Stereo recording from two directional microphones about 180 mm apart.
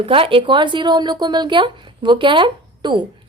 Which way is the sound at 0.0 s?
30° right (ahead or behind).